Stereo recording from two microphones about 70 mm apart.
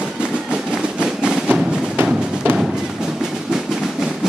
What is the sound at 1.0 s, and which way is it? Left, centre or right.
Music, centre.